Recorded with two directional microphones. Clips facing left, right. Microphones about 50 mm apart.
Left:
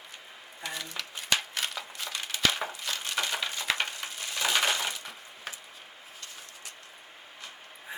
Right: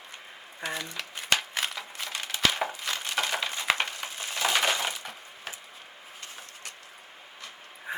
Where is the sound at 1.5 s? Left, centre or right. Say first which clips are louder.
Right 2 dB; centre.